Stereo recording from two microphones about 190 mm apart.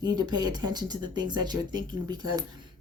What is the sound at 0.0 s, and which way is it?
Speech, 20° right (ahead or behind).